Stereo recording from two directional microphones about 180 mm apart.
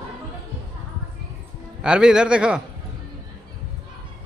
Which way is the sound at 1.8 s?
5° right (ahead or behind).